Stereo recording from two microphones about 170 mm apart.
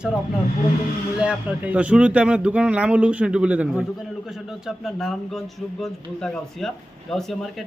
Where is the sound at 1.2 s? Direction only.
5° right (ahead or behind).